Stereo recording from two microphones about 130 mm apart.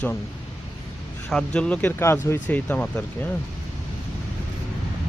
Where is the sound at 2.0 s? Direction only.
20° left (ahead or behind).